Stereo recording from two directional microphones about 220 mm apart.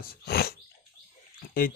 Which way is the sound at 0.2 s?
45° left (ahead or behind).